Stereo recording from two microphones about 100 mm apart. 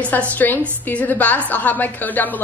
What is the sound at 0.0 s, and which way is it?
A woman's voice, 15° left (ahead or behind).